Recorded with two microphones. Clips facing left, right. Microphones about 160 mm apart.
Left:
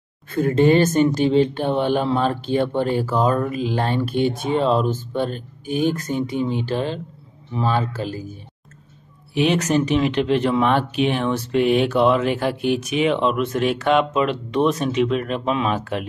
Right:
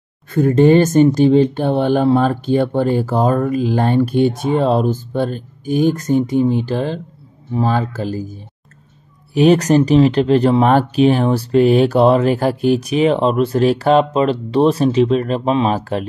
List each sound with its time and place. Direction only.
0.6 s speech: 45° right (ahead or behind)
9.3 s speech: 40° right (ahead or behind)